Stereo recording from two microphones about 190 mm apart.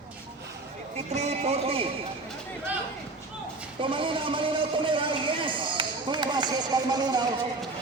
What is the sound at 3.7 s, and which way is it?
A man's voice, 25° right (ahead or behind).